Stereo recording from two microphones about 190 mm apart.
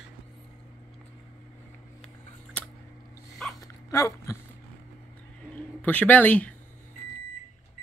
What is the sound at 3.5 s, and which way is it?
Dog, 15° left (ahead or behind).